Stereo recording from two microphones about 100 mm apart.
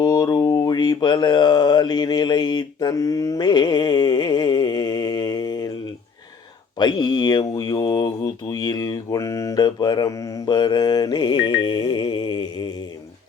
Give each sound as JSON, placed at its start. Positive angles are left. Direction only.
{"t": 0.0, "sound": "speech", "side_deg": 40}
{"t": 2.9, "sound": "mantra", "side_deg": 35}
{"t": 6.7, "sound": "speech", "side_deg": 45}